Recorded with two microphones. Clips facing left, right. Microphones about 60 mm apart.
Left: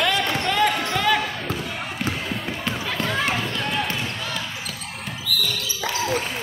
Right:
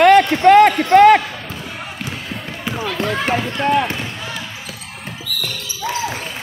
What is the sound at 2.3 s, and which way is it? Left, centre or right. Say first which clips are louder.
Basketball bounce: right 1 dB; centre.